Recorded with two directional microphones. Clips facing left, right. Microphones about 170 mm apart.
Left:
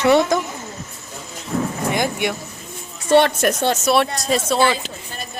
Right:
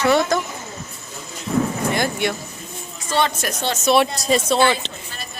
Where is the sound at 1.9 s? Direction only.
15° left (ahead or behind).